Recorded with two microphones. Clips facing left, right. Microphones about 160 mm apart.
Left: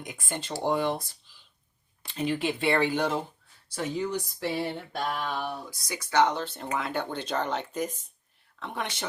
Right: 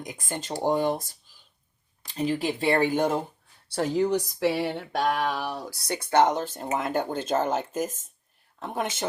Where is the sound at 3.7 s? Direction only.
70° right (ahead or behind).